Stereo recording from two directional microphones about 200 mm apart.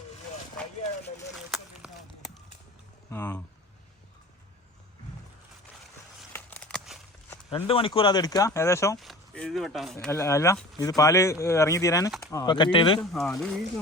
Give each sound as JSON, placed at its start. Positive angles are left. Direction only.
{"t": 1.5, "sound": "a sound", "side_deg": 0}
{"t": 3.1, "sound": "speech", "side_deg": 10}
{"t": 6.3, "sound": "a sound", "side_deg": 5}
{"t": 7.5, "sound": "speech", "side_deg": 25}
{"t": 9.0, "sound": "speech", "side_deg": 0}
{"t": 13.0, "sound": "speech", "side_deg": 0}